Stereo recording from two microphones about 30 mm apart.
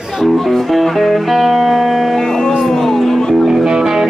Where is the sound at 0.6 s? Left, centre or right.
Centre.